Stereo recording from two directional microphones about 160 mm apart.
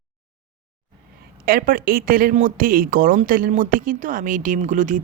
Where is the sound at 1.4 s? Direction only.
65° right (ahead or behind).